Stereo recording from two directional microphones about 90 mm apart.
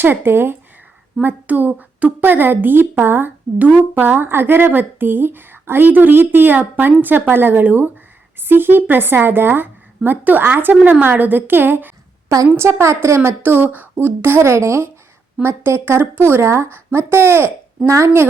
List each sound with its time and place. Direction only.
0.0 s a woman's voice: 20° right (ahead or behind)